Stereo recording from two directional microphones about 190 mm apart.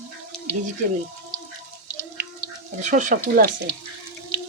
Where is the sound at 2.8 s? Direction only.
45° right (ahead or behind).